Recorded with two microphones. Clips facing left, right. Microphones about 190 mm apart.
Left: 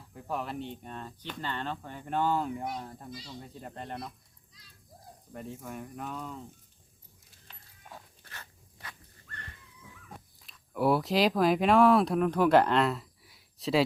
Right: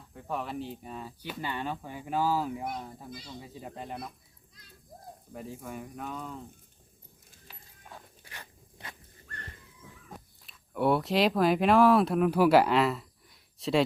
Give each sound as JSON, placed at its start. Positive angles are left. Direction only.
{"t": 0.0, "sound": "speech", "side_deg": 0}
{"t": 5.3, "sound": "speech", "side_deg": 0}
{"t": 7.4, "sound": "a sound", "side_deg": 0}
{"t": 8.2, "sound": "dog", "side_deg": -15}
{"t": 10.4, "sound": "speech", "side_deg": 0}